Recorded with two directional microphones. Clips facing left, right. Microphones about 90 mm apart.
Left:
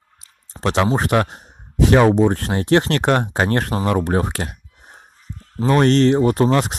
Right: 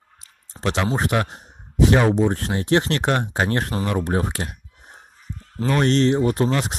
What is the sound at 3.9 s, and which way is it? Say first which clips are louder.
Speech: left 5 dB; 45° left (ahead or behind).